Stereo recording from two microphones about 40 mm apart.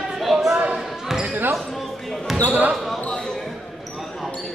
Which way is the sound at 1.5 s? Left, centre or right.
Centre.